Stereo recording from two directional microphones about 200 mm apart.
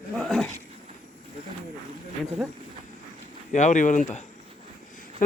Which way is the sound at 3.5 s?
35° left (ahead or behind).